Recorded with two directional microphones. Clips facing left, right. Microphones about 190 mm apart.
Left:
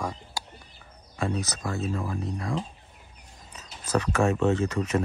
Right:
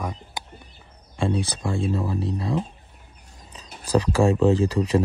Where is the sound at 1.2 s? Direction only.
30° right (ahead or behind).